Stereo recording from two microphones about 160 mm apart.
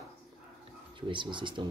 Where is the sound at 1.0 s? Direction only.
30° right (ahead or behind).